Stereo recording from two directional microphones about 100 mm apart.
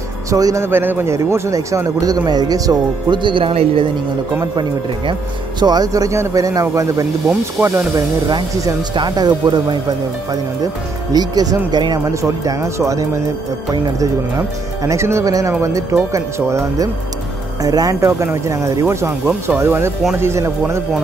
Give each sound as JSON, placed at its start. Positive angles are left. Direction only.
{"t": 0.3, "sound": "a man's voice", "side_deg": -35}
{"t": 0.7, "sound": "a man's voice", "side_deg": -20}
{"t": 5.6, "sound": "a man's voice", "side_deg": -45}
{"t": 8.9, "sound": "a man's voice", "side_deg": -45}
{"t": 12.0, "sound": "a man's voice", "side_deg": -30}